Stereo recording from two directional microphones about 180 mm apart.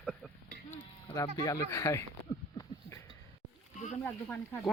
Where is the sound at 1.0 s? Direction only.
20° left (ahead or behind).